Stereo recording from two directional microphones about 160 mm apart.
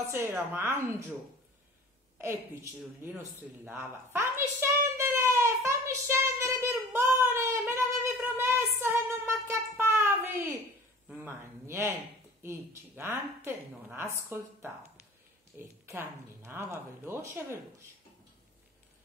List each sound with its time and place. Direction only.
0.1 s a woman's voice: 15° right (ahead or behind)
2.1 s a woman's voice: 15° right (ahead or behind)
3.0 s a sound: 10° right (ahead or behind)
11.1 s a woman's voice: 15° right (ahead or behind)